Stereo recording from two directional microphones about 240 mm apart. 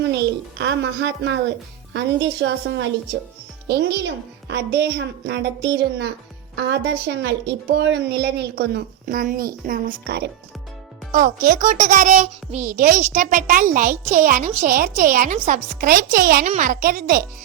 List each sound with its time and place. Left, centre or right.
0.0 s a woman's voice: right
13.9 s speech: centre
14.3 s a child's voice: right